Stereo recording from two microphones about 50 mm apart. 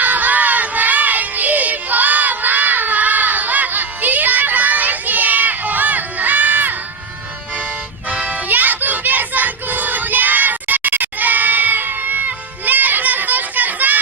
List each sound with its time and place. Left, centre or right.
0.0 s crowd: right
8.1 s music: right